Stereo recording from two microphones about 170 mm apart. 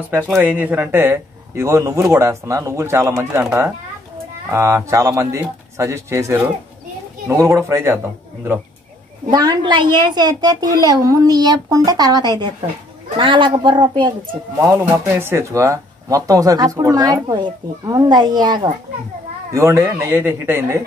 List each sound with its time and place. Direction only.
0.4 s speech: 10° right (ahead or behind)
9.3 s speech: 25° right (ahead or behind)
14.7 s speech: 15° right (ahead or behind)